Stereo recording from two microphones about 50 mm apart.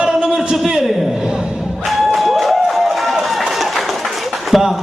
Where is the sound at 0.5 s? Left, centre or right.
Centre.